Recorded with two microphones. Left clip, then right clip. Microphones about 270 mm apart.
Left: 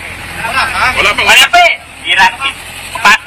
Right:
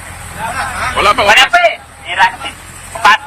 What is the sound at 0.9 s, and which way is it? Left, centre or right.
Speech, centre.